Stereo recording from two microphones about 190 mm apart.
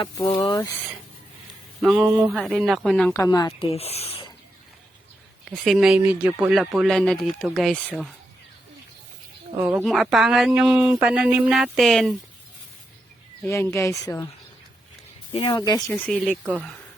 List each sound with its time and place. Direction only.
0.0 s speech: 25° left (ahead or behind)
1.8 s speech: 5° right (ahead or behind)
3.1 s speech: 20° left (ahead or behind)
3.7 s speech: 30° left (ahead or behind)
5.5 s speech: centre (ahead or behind)
9.6 s speech: 10° right (ahead or behind)
9.8 s speech: centre (ahead or behind)
13.4 s speech: 15° left (ahead or behind)
15.3 s speech: 25° left (ahead or behind)
15.9 s speech: 5° left (ahead or behind)